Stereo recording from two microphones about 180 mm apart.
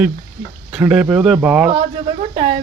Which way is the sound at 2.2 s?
35° right (ahead or behind).